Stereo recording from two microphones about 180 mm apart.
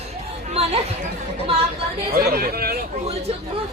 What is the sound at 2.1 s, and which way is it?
Speech, 55° right (ahead or behind).